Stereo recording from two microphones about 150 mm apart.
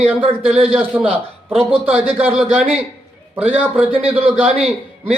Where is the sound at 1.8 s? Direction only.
10° right (ahead or behind).